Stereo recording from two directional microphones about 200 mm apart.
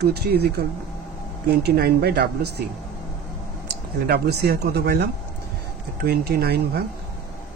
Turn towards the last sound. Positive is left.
turn(degrees=-55)  # may be behind; listen again after turning